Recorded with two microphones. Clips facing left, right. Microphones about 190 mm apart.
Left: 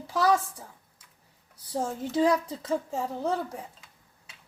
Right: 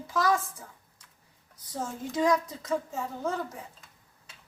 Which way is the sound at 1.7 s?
30° left (ahead or behind).